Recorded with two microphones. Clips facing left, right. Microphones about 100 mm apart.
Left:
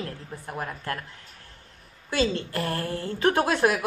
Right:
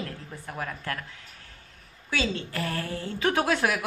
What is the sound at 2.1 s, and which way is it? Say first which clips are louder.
A woman's voice: left 4 dB; 45° left (ahead or behind).